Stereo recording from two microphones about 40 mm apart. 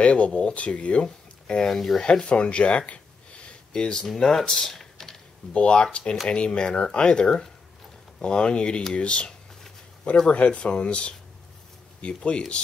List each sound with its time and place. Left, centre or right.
0.0 s speech: left
1.0 s speech: centre
3.4 s a sound: left
4.1 s speech: centre
5.5 s speech: left
10.3 s speech: left